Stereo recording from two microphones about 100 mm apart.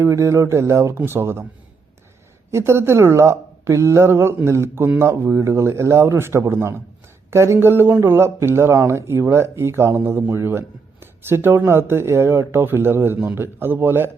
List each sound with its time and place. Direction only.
0.0 s speech: 30° right (ahead or behind)
2.5 s speech: 25° right (ahead or behind)